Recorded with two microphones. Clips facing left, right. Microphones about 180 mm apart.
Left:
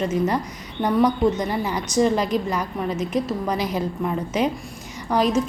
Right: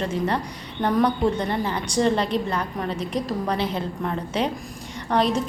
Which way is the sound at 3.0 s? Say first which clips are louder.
Left 5 dB; 35° right (ahead or behind).